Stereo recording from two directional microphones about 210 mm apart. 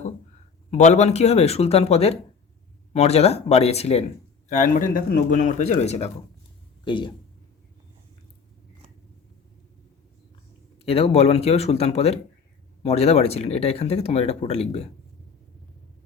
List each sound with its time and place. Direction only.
0.7 s speech: 35° left (ahead or behind)
10.8 s speech: 30° left (ahead or behind)